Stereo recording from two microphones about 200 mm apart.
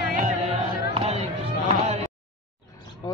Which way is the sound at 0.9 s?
30° right (ahead or behind).